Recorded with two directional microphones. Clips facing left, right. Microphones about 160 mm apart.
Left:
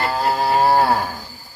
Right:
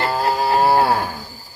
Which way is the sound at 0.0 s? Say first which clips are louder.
Even; centre (ahead or behind).